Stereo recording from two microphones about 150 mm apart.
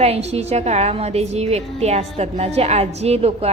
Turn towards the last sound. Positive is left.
turn(degrees=-45)  # may be behind; listen again after turning